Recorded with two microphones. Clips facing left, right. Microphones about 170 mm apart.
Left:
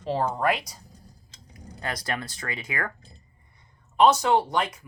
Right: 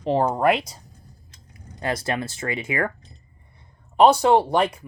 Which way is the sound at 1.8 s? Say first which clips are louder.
Right 6 dB; 25° right (ahead or behind).